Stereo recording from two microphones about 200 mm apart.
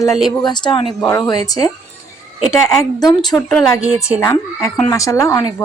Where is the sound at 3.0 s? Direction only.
20° left (ahead or behind).